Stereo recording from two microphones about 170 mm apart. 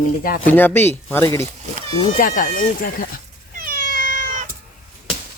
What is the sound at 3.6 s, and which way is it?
Cat, 55° right (ahead or behind).